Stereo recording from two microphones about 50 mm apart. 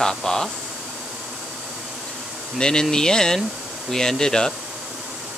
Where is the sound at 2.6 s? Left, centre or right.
Centre.